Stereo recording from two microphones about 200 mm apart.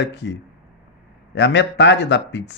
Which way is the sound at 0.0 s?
65° left (ahead or behind).